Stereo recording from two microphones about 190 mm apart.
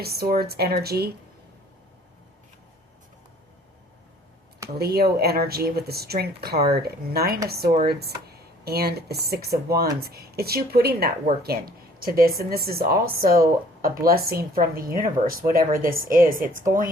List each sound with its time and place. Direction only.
0.0 s speech: 55° right (ahead or behind)
4.8 s speech: 55° right (ahead or behind)